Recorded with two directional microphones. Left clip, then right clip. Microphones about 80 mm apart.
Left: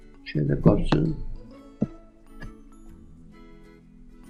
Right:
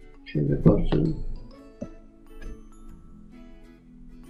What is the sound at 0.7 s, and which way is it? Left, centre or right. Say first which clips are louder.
Speech: left 1 dB; centre.